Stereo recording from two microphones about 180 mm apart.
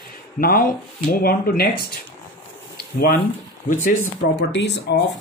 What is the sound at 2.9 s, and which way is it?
Speech, 55° left (ahead or behind).